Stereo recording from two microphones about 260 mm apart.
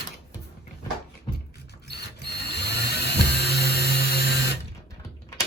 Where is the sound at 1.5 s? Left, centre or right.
Left.